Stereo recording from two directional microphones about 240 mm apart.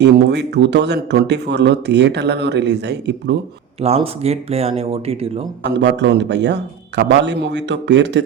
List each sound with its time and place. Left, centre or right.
0.0 s speech: right
3.8 s speech: right
5.7 s speech: right